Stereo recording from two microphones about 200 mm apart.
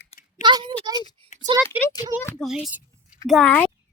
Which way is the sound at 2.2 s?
Centre (ahead or behind).